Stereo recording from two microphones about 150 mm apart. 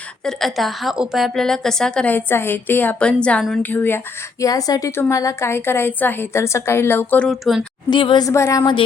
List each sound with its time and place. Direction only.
0.3 s a woman's voice: centre (ahead or behind)
7.9 s a woman's voice: 30° left (ahead or behind)
8.3 s a woman's voice: 20° left (ahead or behind)